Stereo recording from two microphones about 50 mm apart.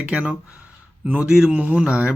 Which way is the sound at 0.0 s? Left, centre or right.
Right.